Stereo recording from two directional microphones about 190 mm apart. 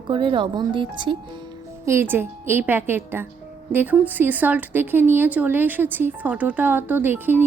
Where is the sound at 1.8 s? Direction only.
15° right (ahead or behind).